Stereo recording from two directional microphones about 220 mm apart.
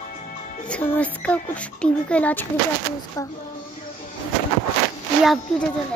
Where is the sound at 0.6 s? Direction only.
5° left (ahead or behind).